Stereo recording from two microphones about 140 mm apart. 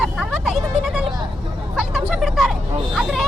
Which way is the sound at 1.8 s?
Centre (ahead or behind).